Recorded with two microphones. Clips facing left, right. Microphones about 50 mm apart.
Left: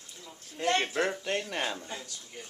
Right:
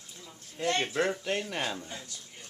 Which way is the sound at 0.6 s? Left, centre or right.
Centre.